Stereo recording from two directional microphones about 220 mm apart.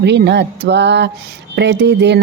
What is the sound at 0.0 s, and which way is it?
Mantra, 50° right (ahead or behind).